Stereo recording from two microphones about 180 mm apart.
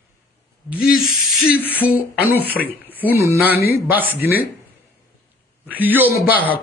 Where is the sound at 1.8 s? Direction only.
10° right (ahead or behind).